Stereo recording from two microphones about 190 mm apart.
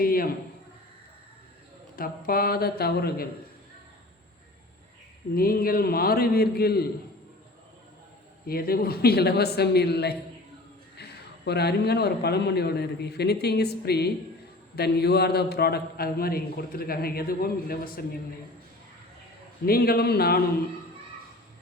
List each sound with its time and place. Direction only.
0.0 s a man's voice: 50° left (ahead or behind)
2.0 s a man's voice: 50° left (ahead or behind)
5.3 s a man's voice: 50° left (ahead or behind)
8.4 s a man's voice: 50° left (ahead or behind)
19.6 s a man's voice: 55° left (ahead or behind)